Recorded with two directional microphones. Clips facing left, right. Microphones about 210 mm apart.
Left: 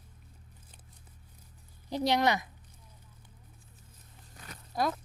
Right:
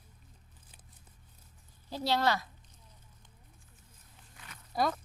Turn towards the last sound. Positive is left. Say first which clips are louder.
# even
turn(degrees=0)  # may be behind; listen again after turning